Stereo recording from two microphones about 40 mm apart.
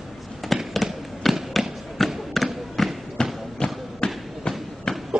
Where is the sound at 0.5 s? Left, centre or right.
Centre.